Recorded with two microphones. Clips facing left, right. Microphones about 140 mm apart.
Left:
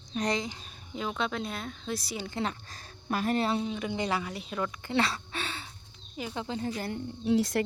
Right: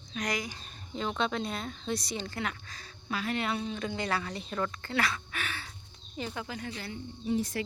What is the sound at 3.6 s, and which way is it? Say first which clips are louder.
A woman's voice: left 2 dB; 15° left (ahead or behind).